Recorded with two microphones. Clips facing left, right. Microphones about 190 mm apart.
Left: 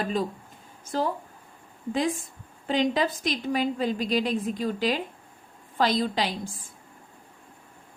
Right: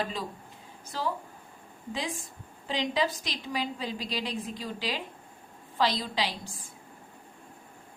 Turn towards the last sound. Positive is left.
turn(degrees=50)  # may be behind; listen again after turning